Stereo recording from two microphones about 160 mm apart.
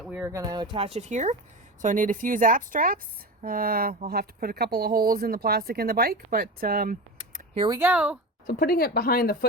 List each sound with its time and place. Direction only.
0.1 s a woman's voice: 15° right (ahead or behind); by 6.9 s 65° right (ahead or behind)
7.8 s a woman's voice: 10° right (ahead or behind)
8.4 s speech: 70° left (ahead or behind)